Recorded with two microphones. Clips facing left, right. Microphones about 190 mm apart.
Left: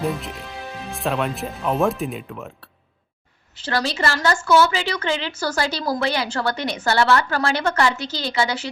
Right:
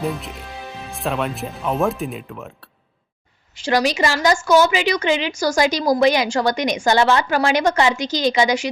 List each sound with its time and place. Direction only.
0.0 s speech: centre (ahead or behind)
3.6 s a woman's voice: 15° right (ahead or behind)